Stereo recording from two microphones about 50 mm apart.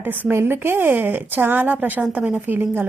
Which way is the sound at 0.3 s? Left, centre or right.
Right.